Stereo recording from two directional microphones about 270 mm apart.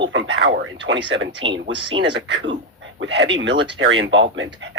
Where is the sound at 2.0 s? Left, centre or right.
Right.